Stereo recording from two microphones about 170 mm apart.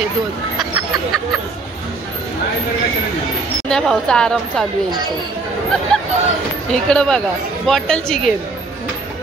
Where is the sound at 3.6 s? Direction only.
5° left (ahead or behind).